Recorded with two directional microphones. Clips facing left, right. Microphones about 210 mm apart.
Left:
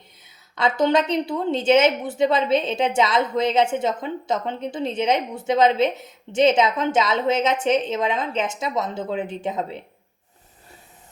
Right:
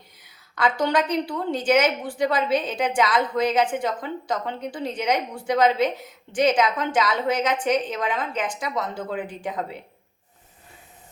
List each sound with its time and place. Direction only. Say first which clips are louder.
0.5 s a woman's voice: left 3 dB; 25° left (ahead or behind)